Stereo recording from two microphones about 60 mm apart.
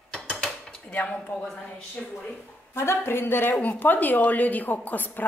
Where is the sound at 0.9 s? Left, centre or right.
Left.